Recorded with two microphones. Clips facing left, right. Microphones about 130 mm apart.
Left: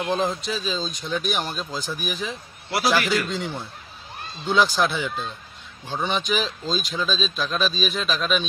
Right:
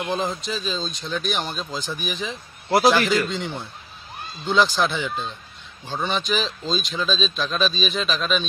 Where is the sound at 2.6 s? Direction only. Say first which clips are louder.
Right 6 dB; 40° right (ahead or behind).